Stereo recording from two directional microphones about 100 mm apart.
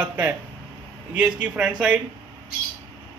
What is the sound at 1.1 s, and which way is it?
Speech, 15° right (ahead or behind).